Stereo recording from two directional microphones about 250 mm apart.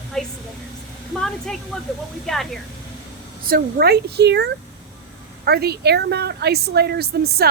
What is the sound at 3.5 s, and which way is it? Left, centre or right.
A woman's voice, right.